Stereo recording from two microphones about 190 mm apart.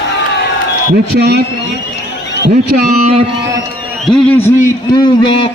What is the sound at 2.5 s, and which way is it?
Speech, 45° right (ahead or behind).